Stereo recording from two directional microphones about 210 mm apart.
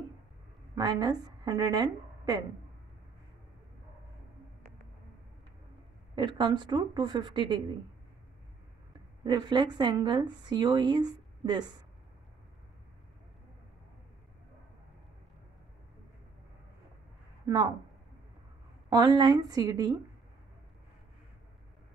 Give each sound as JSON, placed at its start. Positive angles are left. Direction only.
{"t": 0.7, "sound": "a woman's voice", "side_deg": -20}
{"t": 6.1, "sound": "speech", "side_deg": -20}
{"t": 9.2, "sound": "speech", "side_deg": -20}
{"t": 17.5, "sound": "a woman's voice", "side_deg": -20}
{"t": 18.9, "sound": "speech", "side_deg": -20}